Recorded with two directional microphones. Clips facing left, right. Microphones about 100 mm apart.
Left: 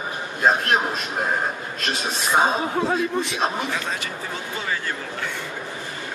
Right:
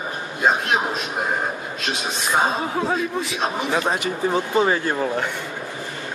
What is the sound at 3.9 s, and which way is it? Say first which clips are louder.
Speech: right 8 dB; 25° right (ahead or behind).